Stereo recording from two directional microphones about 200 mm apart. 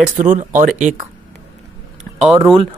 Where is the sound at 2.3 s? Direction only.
25° right (ahead or behind).